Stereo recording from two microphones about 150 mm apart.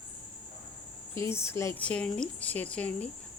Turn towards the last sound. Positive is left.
turn(degrees=5)  # may be behind; listen again after turning